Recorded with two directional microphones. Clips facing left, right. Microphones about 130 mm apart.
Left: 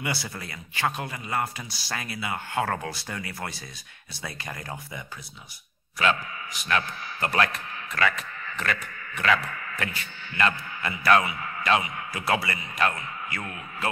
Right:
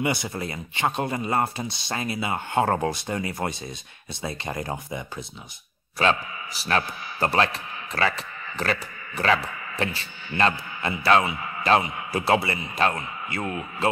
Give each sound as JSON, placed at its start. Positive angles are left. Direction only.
{"t": 0.0, "sound": "a man's voice", "side_deg": -20}
{"t": 9.4, "sound": "speech", "side_deg": -10}
{"t": 9.8, "sound": "speech", "side_deg": -30}